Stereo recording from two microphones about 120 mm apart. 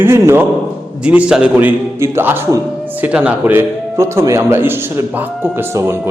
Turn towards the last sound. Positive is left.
turn(degrees=-20)  # may be behind; listen again after turning